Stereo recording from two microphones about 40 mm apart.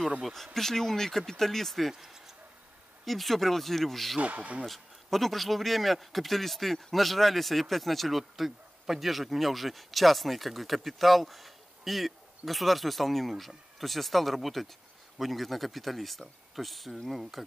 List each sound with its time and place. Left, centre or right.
0.6 s speech: centre
1.9 s speech: centre
3.1 s speech: centre
4.2 s speech: right
4.6 s speech: centre